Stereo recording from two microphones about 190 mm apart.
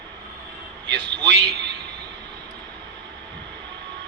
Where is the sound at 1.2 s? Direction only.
65° right (ahead or behind).